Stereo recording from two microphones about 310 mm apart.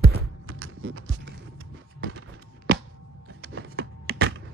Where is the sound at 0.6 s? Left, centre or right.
Right.